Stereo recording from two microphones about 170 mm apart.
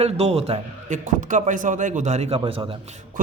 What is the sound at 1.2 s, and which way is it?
A man's voice, 50° right (ahead or behind).